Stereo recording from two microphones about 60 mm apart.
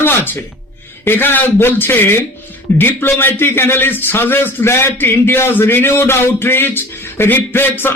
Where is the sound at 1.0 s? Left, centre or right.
Left.